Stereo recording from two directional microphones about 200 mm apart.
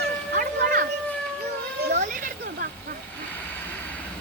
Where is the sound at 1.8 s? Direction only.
60° right (ahead or behind).